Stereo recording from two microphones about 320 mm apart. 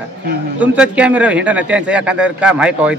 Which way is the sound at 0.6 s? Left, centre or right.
Centre.